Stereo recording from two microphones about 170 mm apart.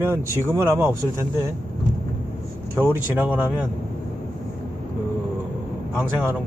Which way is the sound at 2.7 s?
10° right (ahead or behind).